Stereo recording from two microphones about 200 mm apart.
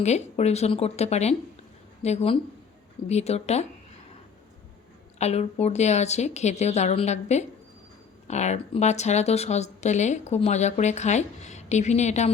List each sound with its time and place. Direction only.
0.0 s speech: 35° left (ahead or behind)
5.1 s speech: 35° left (ahead or behind)